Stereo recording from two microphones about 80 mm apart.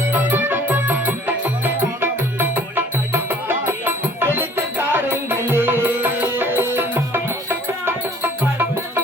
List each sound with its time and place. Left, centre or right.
0.1 s music: right